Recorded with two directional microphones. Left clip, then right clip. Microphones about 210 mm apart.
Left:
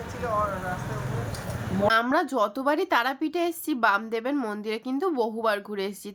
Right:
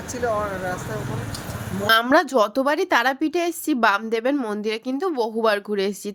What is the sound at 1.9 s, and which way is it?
A woman's voice, 35° right (ahead or behind).